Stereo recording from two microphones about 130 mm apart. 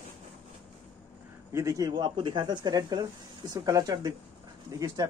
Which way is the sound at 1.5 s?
25° right (ahead or behind).